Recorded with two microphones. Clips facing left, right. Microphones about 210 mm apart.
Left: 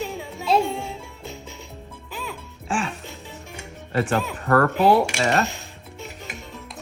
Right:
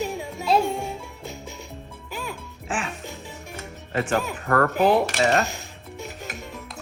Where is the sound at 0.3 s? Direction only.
Centre (ahead or behind).